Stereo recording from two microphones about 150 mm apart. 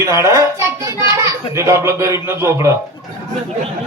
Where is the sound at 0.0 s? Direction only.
20° right (ahead or behind).